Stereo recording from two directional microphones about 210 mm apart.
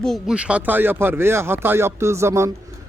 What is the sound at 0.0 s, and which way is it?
A man's voice, centre (ahead or behind).